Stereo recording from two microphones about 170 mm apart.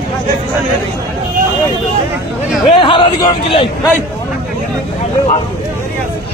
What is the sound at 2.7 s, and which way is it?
Speech, 30° left (ahead or behind).